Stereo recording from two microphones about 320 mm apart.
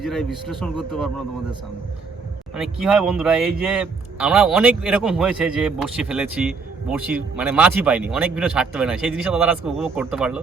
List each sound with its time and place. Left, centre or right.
0.0 s a man's voice: centre
2.6 s a man's voice: centre